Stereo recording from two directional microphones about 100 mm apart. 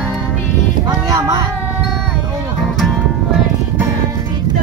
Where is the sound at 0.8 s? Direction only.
40° right (ahead or behind).